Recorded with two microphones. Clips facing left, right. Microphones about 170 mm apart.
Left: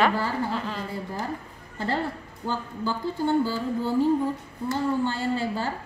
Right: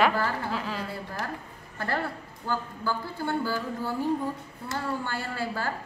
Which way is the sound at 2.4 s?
20° left (ahead or behind).